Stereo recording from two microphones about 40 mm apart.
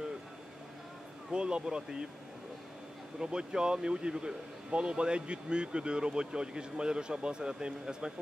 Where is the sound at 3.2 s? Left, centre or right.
Right.